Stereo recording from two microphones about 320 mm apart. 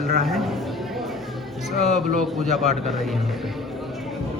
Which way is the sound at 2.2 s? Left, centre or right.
Centre.